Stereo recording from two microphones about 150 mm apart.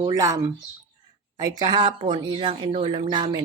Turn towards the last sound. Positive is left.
turn(degrees=-30)  # may be behind; listen again after turning